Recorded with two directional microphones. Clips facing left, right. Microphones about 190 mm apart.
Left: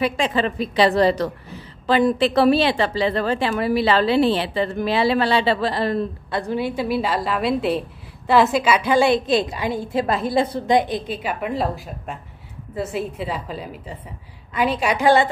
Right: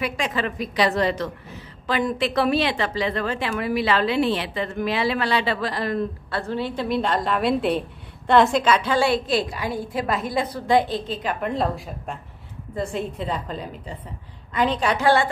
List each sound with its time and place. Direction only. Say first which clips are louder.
0.0 s a woman's voice: left 5 dB; 30° left (ahead or behind)
6.3 s a woman's voice: left 4 dB; 15° left (ahead or behind)
14.6 s a woman's voice: left 2 dB; 10° left (ahead or behind)